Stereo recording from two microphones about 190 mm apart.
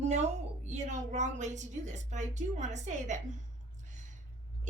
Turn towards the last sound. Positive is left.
turn(degrees=-40)  # may be behind; listen again after turning